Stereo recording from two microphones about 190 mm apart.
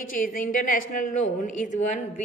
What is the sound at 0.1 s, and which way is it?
A woman's voice, 45° left (ahead or behind).